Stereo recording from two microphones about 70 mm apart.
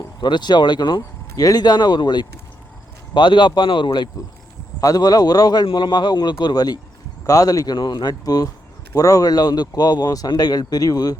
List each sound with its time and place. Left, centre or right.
0.2 s speech: left
1.5 s speech: left
4.8 s speech: left
6.4 s speech: left
7.3 s speech: left